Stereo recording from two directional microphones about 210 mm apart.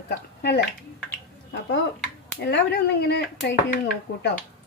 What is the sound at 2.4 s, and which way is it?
A woman's voice, 55° left (ahead or behind).